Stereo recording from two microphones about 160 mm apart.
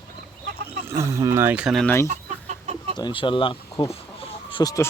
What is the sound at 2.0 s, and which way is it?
Chicken, 50° right (ahead or behind).